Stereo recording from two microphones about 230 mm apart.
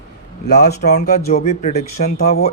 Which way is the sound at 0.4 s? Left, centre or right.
Left.